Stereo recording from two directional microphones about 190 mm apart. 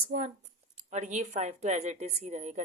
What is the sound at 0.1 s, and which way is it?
A woman's voice, 50° right (ahead or behind).